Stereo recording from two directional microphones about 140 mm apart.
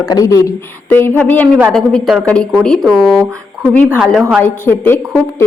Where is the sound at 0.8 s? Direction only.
15° left (ahead or behind).